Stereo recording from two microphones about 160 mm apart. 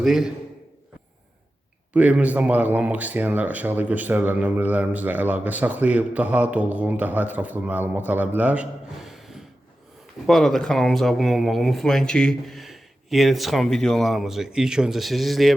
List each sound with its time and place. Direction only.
0.0 s speech: centre (ahead or behind)
1.9 s speech: 10° right (ahead or behind)